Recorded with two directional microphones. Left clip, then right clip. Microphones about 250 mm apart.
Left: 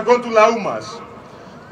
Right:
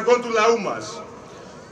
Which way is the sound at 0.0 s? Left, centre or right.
Left.